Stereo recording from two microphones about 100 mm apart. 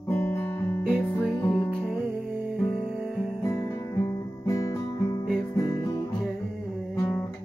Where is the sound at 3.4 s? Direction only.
30° left (ahead or behind).